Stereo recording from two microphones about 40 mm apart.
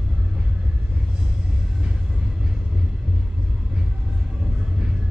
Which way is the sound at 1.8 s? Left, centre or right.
Centre.